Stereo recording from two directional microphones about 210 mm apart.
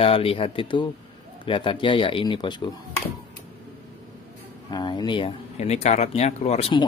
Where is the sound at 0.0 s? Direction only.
25° left (ahead or behind).